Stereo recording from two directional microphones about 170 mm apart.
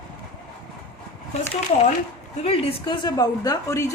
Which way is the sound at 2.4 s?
35° left (ahead or behind).